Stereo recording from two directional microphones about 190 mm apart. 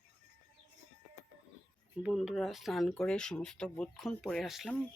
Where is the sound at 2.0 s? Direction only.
5° right (ahead or behind).